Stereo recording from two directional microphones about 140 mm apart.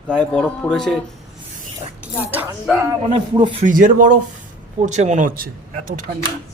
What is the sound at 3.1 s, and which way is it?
Speech, 35° right (ahead or behind).